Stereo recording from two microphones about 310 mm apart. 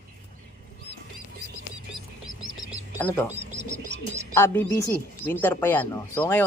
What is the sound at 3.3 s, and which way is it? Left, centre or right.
Bird, right.